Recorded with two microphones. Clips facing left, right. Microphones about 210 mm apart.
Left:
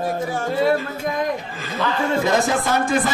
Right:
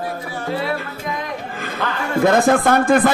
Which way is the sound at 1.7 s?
55° right (ahead or behind).